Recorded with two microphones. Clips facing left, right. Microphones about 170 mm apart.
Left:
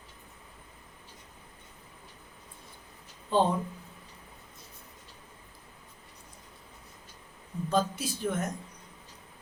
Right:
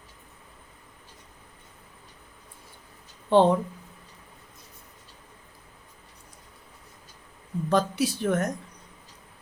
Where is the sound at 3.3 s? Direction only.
75° right (ahead or behind).